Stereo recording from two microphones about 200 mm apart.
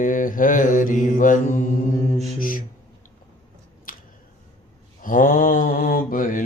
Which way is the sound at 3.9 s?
45° left (ahead or behind).